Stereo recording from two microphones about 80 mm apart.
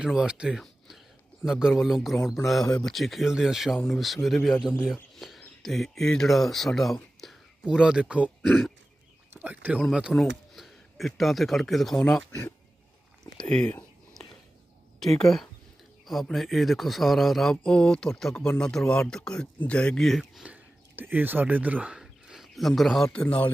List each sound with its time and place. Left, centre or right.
0.0 s speech: centre
5.6 s speech: centre
7.7 s speech: centre
8.4 s speech: centre
9.3 s speech: right
10.1 s speech: centre
13.4 s speech: centre
15.0 s speech: centre
20.4 s speech: right
21.9 s a sound: centre
23.1 s speech: centre